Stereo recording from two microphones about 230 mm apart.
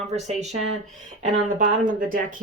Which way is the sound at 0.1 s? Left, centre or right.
Right.